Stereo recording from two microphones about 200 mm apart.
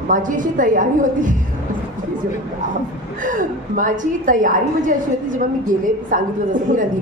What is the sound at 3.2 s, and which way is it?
A woman's voice, 40° right (ahead or behind).